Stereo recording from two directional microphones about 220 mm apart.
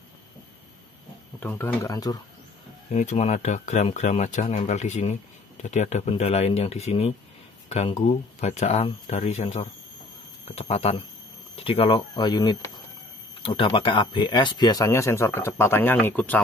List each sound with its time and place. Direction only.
1.4 s speech: 10° left (ahead or behind)
2.9 s speech: 35° left (ahead or behind)
8.4 s speech: 30° left (ahead or behind); by 16.3 s 5° left (ahead or behind)